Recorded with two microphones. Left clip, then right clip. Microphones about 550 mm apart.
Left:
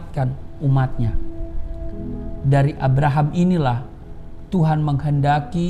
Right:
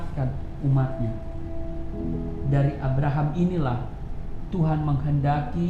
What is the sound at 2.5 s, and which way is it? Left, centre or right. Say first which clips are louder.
A woman's voice: left 8 dB; left.